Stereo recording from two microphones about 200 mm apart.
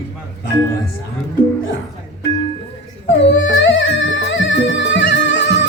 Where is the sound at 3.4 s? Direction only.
75° left (ahead or behind).